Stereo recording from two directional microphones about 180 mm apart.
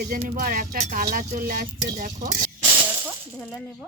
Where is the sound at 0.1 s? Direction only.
50° right (ahead or behind).